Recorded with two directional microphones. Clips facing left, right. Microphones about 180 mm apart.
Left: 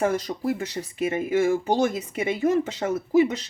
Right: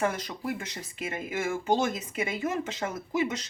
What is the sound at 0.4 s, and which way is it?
Speech, 30° left (ahead or behind).